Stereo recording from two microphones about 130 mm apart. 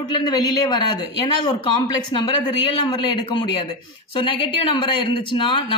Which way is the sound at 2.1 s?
40° left (ahead or behind).